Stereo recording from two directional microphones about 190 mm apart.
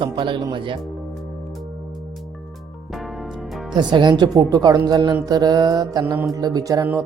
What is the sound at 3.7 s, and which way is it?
Speech, 25° right (ahead or behind).